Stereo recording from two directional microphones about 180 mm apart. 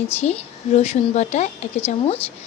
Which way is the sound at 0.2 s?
35° left (ahead or behind).